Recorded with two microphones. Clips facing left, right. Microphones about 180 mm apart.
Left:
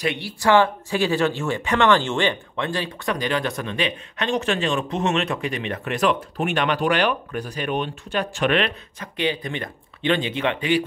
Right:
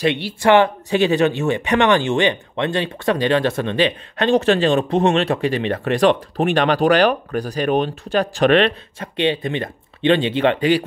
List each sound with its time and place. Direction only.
0.0 s speech: 25° right (ahead or behind)